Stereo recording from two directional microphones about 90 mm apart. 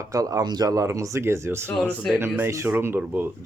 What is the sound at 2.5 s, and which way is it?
Speech, 35° right (ahead or behind).